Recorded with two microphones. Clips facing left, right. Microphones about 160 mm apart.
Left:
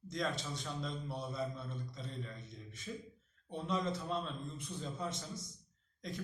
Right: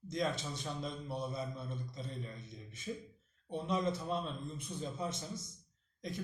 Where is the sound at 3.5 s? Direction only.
15° right (ahead or behind).